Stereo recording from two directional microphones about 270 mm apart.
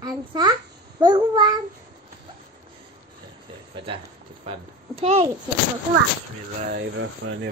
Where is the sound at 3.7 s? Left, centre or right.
Centre.